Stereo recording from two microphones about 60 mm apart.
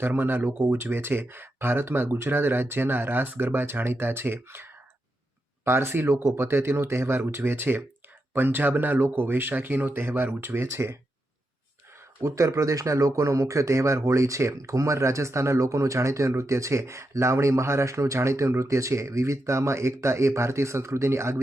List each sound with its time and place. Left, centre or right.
0.0 s speech: right
12.2 s speech: right